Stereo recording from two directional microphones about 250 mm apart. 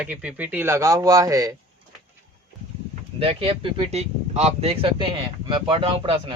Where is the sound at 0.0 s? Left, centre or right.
Centre.